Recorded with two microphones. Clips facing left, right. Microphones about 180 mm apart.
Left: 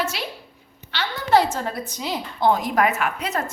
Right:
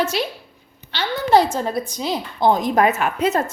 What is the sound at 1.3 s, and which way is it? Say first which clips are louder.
A woman's voice: right 2 dB; 15° right (ahead or behind).